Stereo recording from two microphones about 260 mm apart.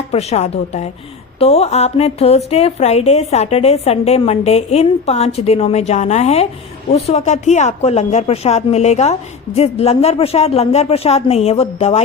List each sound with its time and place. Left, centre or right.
0.1 s a woman's voice: left